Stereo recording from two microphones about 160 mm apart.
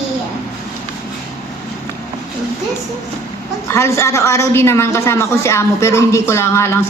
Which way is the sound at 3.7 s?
15° left (ahead or behind).